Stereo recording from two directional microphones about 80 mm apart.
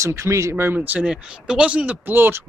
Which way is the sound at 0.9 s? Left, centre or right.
Centre.